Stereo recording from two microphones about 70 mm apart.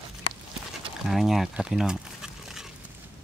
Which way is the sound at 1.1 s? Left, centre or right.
Centre.